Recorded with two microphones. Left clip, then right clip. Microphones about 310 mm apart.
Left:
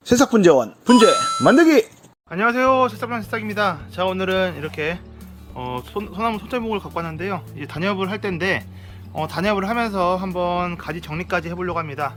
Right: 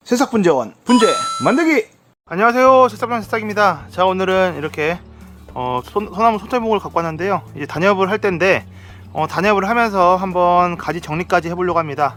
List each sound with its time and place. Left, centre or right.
0.1 s speech: centre
2.3 s speech: centre